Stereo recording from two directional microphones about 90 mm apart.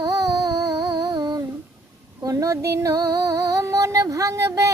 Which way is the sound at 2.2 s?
40° right (ahead or behind).